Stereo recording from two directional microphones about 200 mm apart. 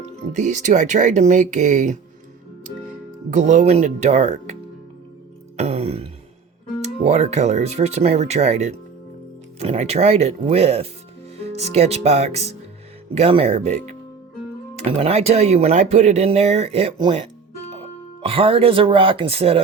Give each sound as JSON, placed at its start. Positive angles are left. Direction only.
{"t": 0.3, "sound": "speech", "side_deg": -35}
{"t": 3.2, "sound": "speech", "side_deg": -40}
{"t": 5.5, "sound": "a sound", "side_deg": -30}
{"t": 6.8, "sound": "speech", "side_deg": -35}
{"t": 14.8, "sound": "speech", "side_deg": -30}